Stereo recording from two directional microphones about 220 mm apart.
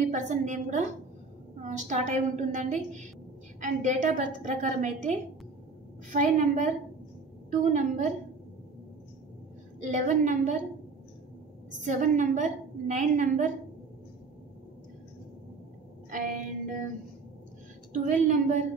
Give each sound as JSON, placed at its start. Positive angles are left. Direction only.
{"t": 0.1, "sound": "a woman's voice", "side_deg": -35}
{"t": 9.8, "sound": "a woman's voice", "side_deg": -35}
{"t": 11.8, "sound": "a woman's voice", "side_deg": -35}
{"t": 16.1, "sound": "music", "side_deg": -35}
{"t": 17.9, "sound": "a woman's voice", "side_deg": -35}